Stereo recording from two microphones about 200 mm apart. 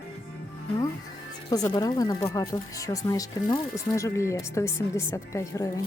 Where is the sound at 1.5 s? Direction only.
20° left (ahead or behind).